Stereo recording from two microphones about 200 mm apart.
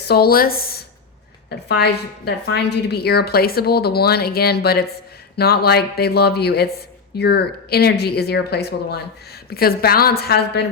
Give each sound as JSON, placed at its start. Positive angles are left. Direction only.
{"t": 0.1, "sound": "a woman's voice", "side_deg": 50}